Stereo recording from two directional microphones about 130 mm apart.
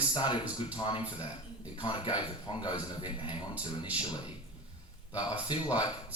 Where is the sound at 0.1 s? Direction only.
35° left (ahead or behind).